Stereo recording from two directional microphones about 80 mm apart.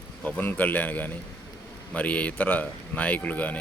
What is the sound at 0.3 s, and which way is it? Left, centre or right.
Speech, left.